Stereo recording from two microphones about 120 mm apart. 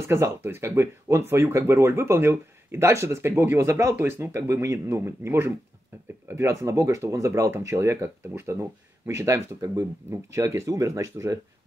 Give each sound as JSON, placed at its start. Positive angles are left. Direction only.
{"t": 0.0, "sound": "speech", "side_deg": -20}